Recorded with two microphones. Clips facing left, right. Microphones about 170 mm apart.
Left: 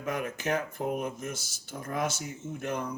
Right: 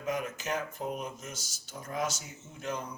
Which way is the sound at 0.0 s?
55° left (ahead or behind).